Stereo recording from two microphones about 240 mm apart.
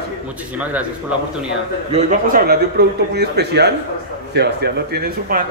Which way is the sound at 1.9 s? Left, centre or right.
Right.